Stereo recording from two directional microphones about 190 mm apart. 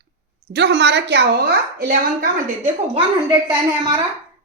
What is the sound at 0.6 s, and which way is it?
A woman's voice, 65° right (ahead or behind).